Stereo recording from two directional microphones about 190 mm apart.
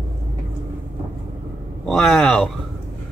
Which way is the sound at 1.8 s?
5° left (ahead or behind).